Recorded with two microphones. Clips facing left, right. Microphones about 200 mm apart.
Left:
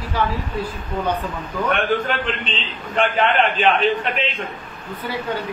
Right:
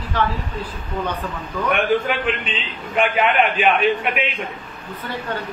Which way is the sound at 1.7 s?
10° right (ahead or behind).